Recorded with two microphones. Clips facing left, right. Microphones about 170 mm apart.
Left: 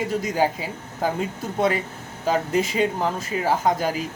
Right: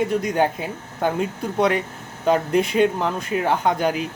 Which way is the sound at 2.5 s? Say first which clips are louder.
Right 3 dB; 60° right (ahead or behind).